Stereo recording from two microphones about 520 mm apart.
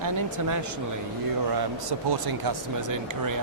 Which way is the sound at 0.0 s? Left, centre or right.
Right.